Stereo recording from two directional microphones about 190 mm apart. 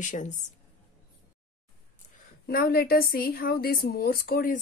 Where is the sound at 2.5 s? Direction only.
50° left (ahead or behind).